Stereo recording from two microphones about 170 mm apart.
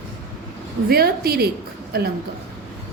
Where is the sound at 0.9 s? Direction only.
65° right (ahead or behind).